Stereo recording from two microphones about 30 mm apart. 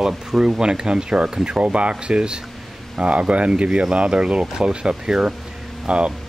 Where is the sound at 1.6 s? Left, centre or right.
Right.